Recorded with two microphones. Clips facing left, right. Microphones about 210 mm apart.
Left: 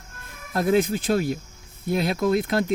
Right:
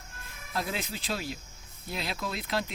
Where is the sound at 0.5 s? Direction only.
50° left (ahead or behind).